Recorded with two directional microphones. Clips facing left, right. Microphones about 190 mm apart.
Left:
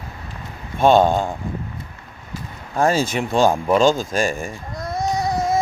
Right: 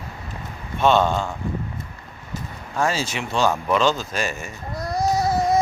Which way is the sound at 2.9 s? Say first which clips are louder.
Left 6 dB; 50° left (ahead or behind).